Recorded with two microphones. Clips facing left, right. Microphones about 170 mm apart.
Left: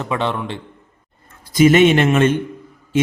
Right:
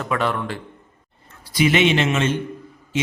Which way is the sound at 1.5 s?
45° left (ahead or behind).